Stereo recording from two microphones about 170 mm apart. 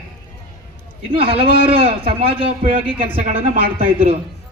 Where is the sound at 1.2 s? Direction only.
35° right (ahead or behind).